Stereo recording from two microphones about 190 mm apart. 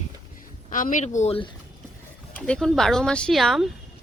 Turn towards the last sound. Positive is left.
turn(degrees=0)  # may be behind; listen again after turning